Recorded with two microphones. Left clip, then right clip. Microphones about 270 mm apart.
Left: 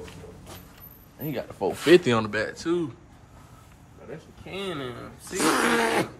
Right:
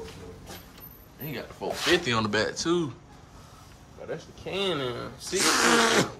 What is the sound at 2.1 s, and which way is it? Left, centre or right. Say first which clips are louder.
Speech: even; centre.